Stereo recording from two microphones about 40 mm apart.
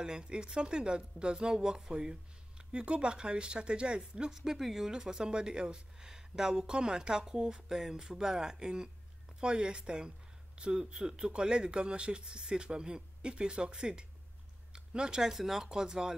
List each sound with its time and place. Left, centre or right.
0.0 s speech: right
4.3 s speech: centre
15.3 s speech: centre
15.7 s speech: centre